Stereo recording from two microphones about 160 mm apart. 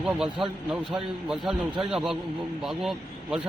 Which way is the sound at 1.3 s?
5° right (ahead or behind).